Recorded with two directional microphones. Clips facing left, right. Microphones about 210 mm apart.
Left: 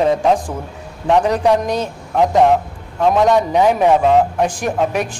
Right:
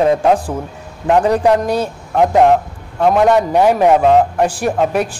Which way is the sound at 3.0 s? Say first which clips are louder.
Right 2 dB; 10° right (ahead or behind).